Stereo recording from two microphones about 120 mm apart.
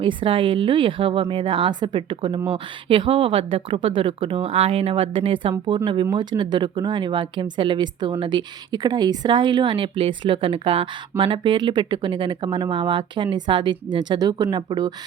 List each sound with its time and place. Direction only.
0.0 s speech: 45° right (ahead or behind)